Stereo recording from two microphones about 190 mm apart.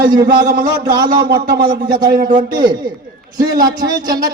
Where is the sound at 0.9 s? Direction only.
20° right (ahead or behind).